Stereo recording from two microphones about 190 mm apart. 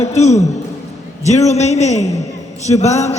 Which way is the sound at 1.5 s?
35° left (ahead or behind).